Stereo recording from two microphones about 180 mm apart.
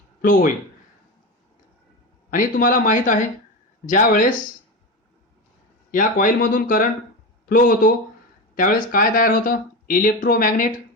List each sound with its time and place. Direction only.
0.2 s speech: 50° left (ahead or behind)
2.3 s speech: 50° left (ahead or behind)
5.9 s speech: 50° left (ahead or behind)